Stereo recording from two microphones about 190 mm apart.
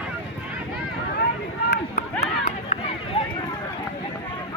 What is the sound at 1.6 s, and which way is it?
Run, 60° left (ahead or behind).